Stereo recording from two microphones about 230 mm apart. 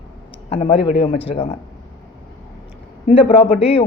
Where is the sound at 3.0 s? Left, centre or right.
Left.